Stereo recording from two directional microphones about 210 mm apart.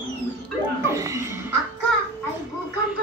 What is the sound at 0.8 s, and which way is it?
Music, 15° right (ahead or behind).